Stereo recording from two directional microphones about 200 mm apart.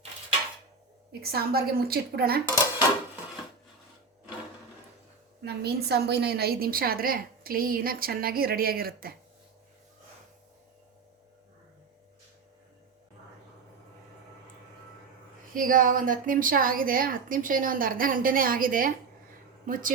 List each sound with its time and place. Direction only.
1.2 s a woman's voice: 50° right (ahead or behind)
5.4 s a woman's voice: 55° right (ahead or behind)
15.5 s a woman's voice: 45° right (ahead or behind)